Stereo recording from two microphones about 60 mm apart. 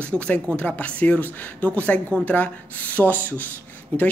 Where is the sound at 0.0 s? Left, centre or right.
Left.